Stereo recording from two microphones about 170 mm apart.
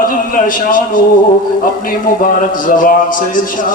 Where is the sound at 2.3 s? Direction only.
50° left (ahead or behind).